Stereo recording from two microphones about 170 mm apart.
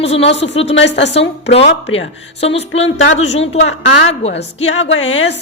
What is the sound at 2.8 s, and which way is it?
Speech, 40° left (ahead or behind).